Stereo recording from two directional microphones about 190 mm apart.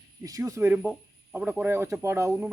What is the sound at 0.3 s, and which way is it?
Speech, 15° right (ahead or behind).